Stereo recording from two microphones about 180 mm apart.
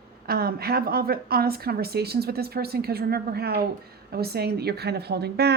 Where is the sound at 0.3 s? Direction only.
60° right (ahead or behind).